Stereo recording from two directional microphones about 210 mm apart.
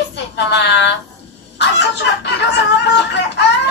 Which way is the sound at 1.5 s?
55° left (ahead or behind).